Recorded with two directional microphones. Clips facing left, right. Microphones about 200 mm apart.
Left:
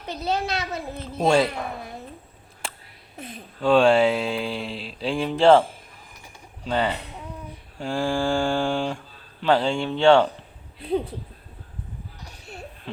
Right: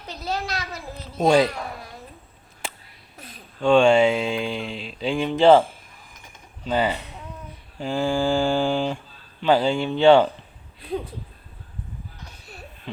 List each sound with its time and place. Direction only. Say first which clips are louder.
0.1 s a child's voice: left 3 dB; 20° left (ahead or behind)
0.9 s mantra: right 2 dB; centre (ahead or behind)
3.6 s mantra: right 1 dB; 5° left (ahead or behind)
6.7 s speech: right 2 dB; 5° right (ahead or behind)
7.8 s mantra: right 2 dB; 5° right (ahead or behind)